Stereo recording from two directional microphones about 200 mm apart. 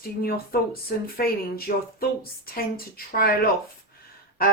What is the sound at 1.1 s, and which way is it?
Speech, 50° left (ahead or behind).